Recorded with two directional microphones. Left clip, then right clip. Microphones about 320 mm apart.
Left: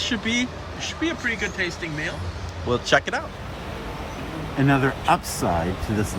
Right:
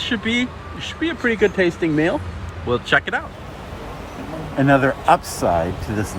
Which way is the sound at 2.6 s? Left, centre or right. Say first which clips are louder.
Right 2 dB; centre.